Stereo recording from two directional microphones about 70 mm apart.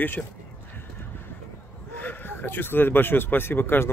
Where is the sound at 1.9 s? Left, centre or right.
Left.